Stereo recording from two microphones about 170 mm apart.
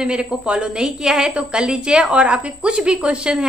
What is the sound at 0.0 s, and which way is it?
A woman's voice, 5° right (ahead or behind).